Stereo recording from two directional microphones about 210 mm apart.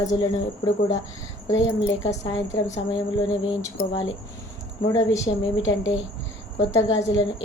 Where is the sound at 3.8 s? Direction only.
45° left (ahead or behind).